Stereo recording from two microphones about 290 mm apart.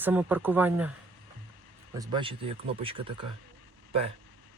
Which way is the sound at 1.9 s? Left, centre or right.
Centre.